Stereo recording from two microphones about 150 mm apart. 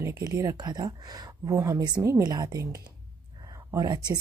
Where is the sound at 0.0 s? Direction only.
20° right (ahead or behind).